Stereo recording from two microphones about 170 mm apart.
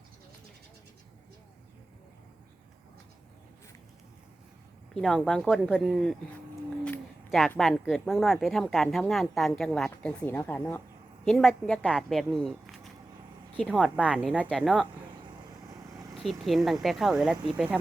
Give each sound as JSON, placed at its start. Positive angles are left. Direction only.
{"t": 4.9, "sound": "speech", "side_deg": 5}
{"t": 7.3, "sound": "speech", "side_deg": 0}
{"t": 15.7, "sound": "vehicle", "side_deg": -20}
{"t": 16.4, "sound": "speech", "side_deg": 0}